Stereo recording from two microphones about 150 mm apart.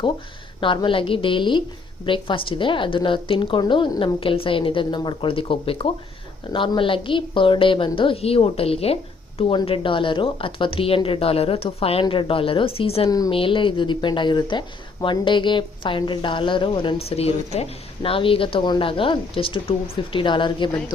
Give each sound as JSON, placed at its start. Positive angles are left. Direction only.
{"t": 0.6, "sound": "a woman's voice", "side_deg": 35}
{"t": 13.1, "sound": "a woman's voice", "side_deg": 25}
{"t": 13.3, "sound": "a woman's voice", "side_deg": 35}